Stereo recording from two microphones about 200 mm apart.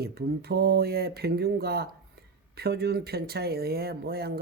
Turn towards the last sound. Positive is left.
turn(degrees=-50)  # may be behind; listen again after turning